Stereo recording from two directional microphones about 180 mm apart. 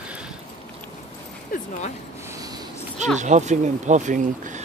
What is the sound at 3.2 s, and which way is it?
Speech, 40° right (ahead or behind).